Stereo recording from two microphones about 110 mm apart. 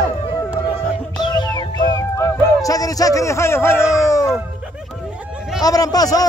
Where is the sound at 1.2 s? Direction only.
40° left (ahead or behind); by 3.7 s 25° left (ahead or behind).